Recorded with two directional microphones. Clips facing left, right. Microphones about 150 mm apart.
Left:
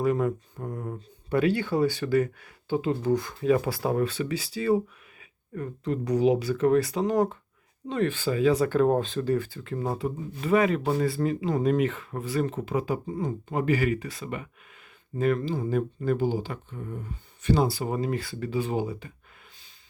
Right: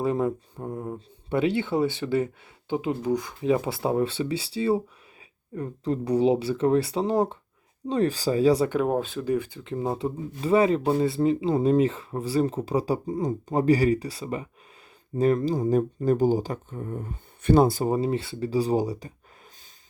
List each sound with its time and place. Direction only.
0.0 s speech: 25° right (ahead or behind)
8.8 s speech: 10° right (ahead or behind); by 17.9 s 45° right (ahead or behind)
17.9 s speech: 30° right (ahead or behind)